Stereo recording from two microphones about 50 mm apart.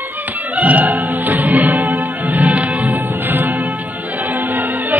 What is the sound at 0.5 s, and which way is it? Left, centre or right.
Music, right.